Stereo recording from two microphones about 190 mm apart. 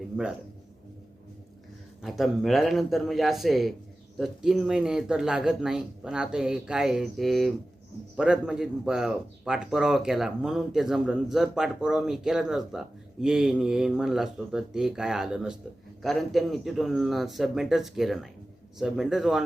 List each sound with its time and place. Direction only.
2.0 s speech: centre (ahead or behind)